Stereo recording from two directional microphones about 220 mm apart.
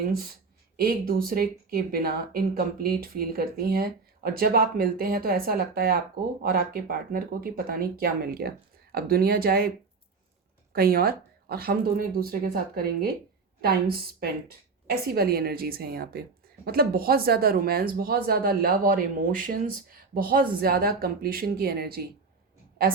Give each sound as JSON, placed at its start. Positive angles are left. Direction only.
{"t": 0.8, "sound": "speech", "side_deg": -40}
{"t": 10.7, "sound": "speech", "side_deg": -45}